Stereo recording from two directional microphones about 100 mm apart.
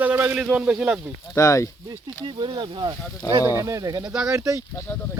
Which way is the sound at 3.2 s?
35° left (ahead or behind).